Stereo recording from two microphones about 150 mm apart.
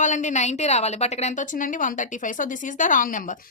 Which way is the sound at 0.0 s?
55° left (ahead or behind).